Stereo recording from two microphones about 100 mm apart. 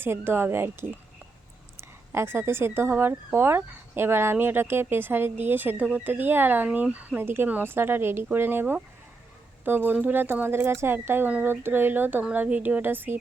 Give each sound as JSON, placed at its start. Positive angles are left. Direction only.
{"t": 0.0, "sound": "speech", "side_deg": -20}
{"t": 2.1, "sound": "speech", "side_deg": -25}